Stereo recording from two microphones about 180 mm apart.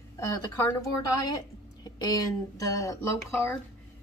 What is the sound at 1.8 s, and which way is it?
A woman's voice, 20° left (ahead or behind).